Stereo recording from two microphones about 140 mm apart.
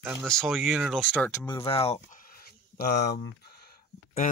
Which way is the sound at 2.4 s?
90° left.